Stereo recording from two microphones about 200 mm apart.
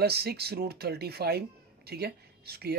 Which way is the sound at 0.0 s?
55° right (ahead or behind).